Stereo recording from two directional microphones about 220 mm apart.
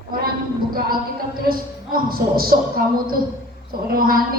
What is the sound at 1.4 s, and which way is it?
A woman's voice, 40° right (ahead or behind).